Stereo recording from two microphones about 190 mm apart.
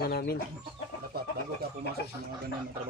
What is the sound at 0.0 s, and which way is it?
Speech, 55° left (ahead or behind).